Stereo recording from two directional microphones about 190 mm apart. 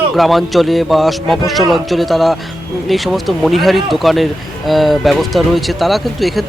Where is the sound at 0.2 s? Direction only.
Centre (ahead or behind).